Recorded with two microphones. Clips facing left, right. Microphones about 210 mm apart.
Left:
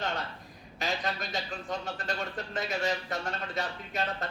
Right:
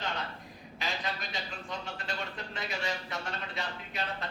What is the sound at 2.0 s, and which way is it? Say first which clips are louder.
Speech: left 4 dB; 45° left (ahead or behind).